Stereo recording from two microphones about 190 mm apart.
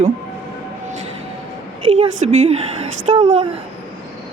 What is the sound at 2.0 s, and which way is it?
Speech, 35° right (ahead or behind).